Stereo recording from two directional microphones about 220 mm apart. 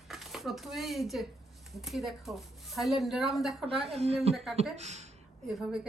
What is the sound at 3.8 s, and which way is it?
Speech, 25° right (ahead or behind).